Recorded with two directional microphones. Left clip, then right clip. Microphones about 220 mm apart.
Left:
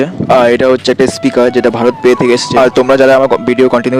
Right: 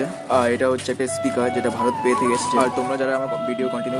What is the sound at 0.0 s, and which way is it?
Speech, 45° left (ahead or behind).